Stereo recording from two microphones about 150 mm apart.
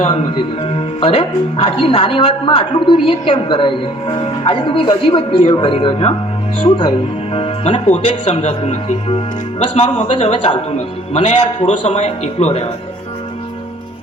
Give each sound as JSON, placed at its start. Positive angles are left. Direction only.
{"t": 0.0, "sound": "speech", "side_deg": 40}